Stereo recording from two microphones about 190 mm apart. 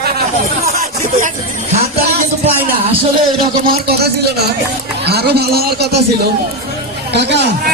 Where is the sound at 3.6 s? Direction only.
55° right (ahead or behind).